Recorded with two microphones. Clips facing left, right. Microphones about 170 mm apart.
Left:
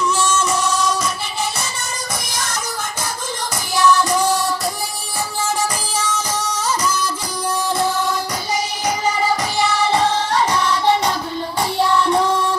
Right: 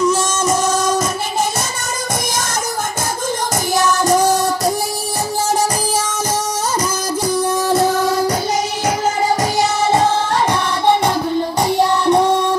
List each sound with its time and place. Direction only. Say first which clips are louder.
0.0 s music: right 3 dB; 40° right (ahead or behind)
3.7 s music: right 1 dB; 45° right (ahead or behind)
5.6 s music: right 5 dB; 45° right (ahead or behind)
7.7 s music: right 6 dB; 45° right (ahead or behind)
9.6 s music: right 2 dB; 45° right (ahead or behind)
11.8 s music: right 2 dB; 20° right (ahead or behind)